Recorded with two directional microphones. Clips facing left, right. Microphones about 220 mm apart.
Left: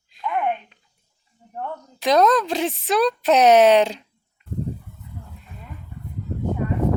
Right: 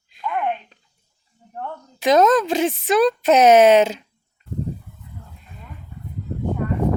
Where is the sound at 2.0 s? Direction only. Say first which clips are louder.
Right 2 dB; centre (ahead or behind).